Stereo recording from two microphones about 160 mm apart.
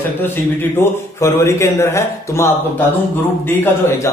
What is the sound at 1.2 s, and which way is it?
A man's voice, 15° left (ahead or behind).